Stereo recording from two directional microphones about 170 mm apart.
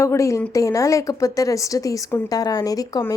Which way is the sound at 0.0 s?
15° left (ahead or behind).